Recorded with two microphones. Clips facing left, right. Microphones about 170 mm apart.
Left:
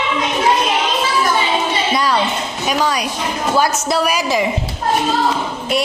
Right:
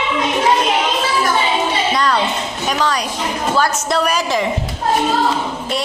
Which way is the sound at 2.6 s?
10° left (ahead or behind).